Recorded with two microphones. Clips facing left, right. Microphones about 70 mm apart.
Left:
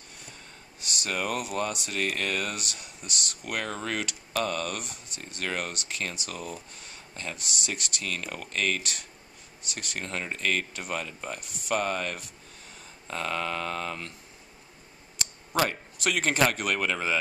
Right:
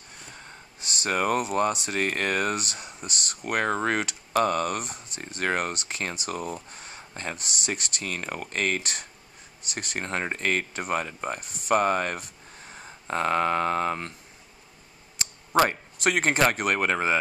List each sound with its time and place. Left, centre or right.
0.7 s speech: right
15.5 s speech: right